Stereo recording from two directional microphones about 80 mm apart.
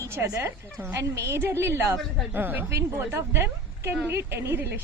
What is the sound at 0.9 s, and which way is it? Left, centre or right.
A woman's voice, right.